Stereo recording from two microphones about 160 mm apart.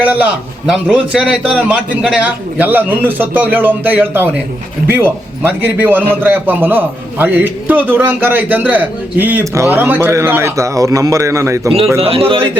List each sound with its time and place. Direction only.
0.0 s a man's voice: 10° right (ahead or behind)
5.4 s a man's voice: 10° right (ahead or behind)
11.9 s a man's voice: 35° right (ahead or behind)